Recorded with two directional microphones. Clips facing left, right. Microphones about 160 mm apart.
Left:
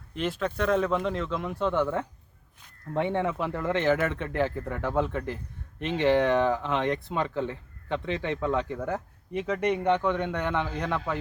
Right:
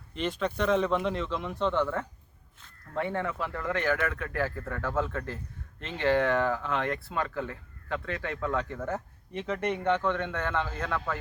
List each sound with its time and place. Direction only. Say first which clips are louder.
0.1 s speech: left 1 dB; 5° left (ahead or behind)